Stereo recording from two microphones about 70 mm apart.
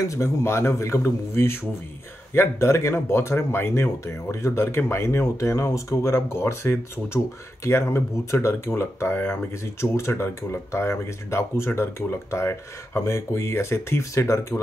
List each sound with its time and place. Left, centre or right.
0.1 s speech: left